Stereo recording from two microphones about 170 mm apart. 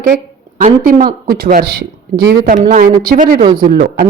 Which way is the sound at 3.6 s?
60° right (ahead or behind).